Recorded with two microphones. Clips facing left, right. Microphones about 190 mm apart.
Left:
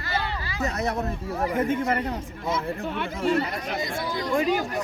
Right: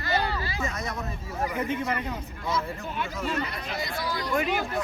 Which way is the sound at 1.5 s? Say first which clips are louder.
Left 6 dB; 45° left (ahead or behind).